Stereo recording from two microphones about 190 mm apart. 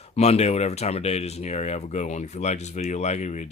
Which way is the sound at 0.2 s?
35° left (ahead or behind).